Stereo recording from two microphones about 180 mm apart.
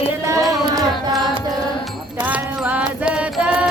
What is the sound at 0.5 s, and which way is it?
Carnatic music, 20° right (ahead or behind).